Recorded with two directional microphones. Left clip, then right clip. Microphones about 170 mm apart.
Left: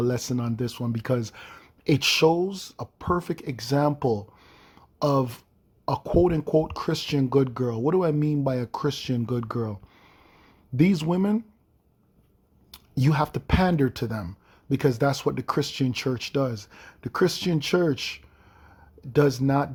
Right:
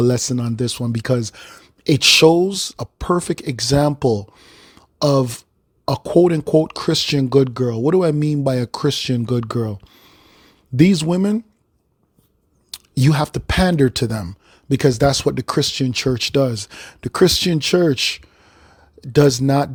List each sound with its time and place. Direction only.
0.0 s speech: 40° right (ahead or behind)
12.7 s speech: 45° right (ahead or behind)